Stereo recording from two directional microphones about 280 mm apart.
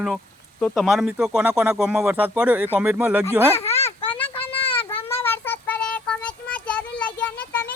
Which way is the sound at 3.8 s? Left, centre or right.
Centre.